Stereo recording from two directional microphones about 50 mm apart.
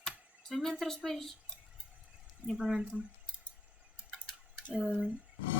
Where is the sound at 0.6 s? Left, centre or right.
Centre.